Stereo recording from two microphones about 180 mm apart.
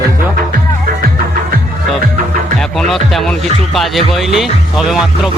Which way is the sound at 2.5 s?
Centre (ahead or behind).